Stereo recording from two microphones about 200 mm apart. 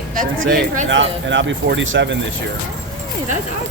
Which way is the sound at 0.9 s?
65° right (ahead or behind).